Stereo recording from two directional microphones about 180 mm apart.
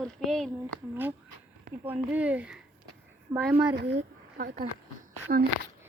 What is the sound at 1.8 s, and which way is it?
Speech, 10° right (ahead or behind).